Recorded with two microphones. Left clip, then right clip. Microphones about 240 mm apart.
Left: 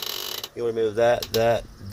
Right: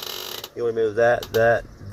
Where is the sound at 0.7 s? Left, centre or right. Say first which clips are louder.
Right 1 dB; centre.